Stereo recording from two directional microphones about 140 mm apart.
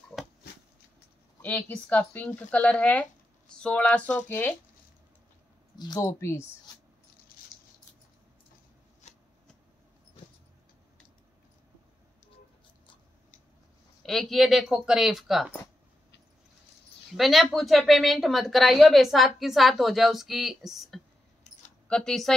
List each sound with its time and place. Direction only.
1.4 s speech: 10° left (ahead or behind)
5.8 s speech: 25° left (ahead or behind)
9.0 s shuffling cards: 50° left (ahead or behind)
14.0 s a woman's voice: centre (ahead or behind)
17.2 s a woman's voice: centre (ahead or behind)
21.5 s keys jangling: 55° left (ahead or behind)
21.8 s speech: 5° left (ahead or behind)